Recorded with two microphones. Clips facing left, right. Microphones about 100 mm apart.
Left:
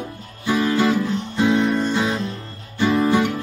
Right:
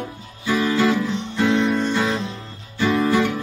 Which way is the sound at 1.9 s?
15° left (ahead or behind).